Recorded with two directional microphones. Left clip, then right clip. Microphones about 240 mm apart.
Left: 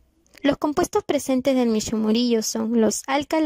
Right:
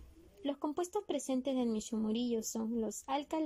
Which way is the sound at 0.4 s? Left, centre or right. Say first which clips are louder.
Left 16 dB; left.